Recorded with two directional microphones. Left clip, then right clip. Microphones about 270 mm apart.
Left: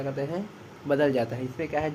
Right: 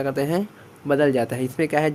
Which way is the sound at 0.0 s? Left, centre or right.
Right.